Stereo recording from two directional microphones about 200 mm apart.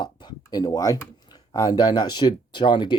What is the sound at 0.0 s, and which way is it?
Speech, 20° left (ahead or behind).